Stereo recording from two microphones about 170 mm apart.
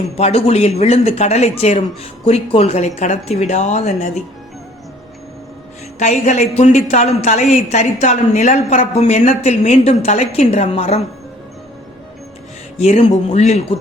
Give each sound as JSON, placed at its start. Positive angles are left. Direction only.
{"t": 0.2, "sound": "a woman's voice", "side_deg": 35}
{"t": 6.0, "sound": "a woman's voice", "side_deg": 45}
{"t": 12.8, "sound": "a woman's voice", "side_deg": 40}